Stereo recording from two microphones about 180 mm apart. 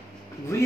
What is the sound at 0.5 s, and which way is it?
Speech, 15° left (ahead or behind).